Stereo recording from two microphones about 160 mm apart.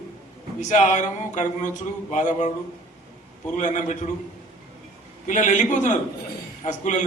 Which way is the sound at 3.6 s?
50° left (ahead or behind).